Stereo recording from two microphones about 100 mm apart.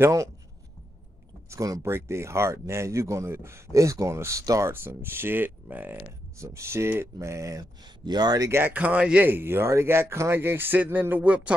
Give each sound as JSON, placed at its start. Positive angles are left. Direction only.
{"t": 0.0, "sound": "speech", "side_deg": -30}
{"t": 1.5, "sound": "speech", "side_deg": -30}
{"t": 6.3, "sound": "speech", "side_deg": -30}
{"t": 7.8, "sound": "speech", "side_deg": -45}
{"t": 8.5, "sound": "speech", "side_deg": -20}